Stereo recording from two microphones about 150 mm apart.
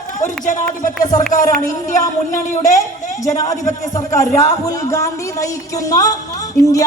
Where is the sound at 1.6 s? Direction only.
60° left (ahead or behind).